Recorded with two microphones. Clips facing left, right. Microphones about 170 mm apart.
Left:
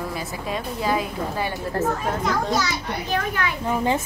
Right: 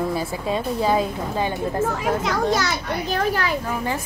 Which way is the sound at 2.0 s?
75° right (ahead or behind).